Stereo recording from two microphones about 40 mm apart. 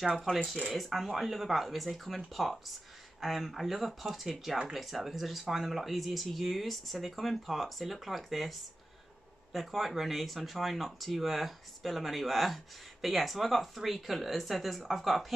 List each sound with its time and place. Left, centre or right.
0.0 s speech: centre